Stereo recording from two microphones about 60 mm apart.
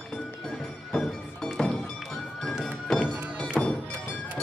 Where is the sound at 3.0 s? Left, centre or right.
Right.